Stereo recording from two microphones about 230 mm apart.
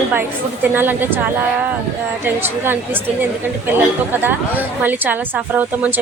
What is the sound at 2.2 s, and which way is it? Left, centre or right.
A woman's voice, centre.